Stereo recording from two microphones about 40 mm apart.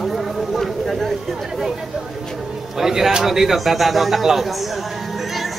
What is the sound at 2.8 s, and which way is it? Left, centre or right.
A man's voice, centre.